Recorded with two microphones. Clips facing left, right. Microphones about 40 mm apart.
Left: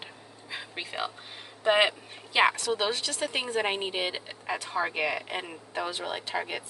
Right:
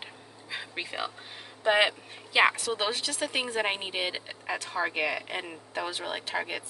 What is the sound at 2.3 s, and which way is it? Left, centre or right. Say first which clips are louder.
Speech: even; centre.